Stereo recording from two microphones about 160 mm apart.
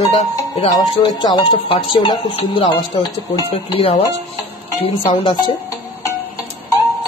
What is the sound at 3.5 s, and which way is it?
Speech, 40° left (ahead or behind).